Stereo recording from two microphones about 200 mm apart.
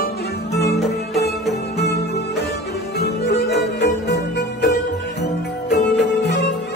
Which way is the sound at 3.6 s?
60° left (ahead or behind).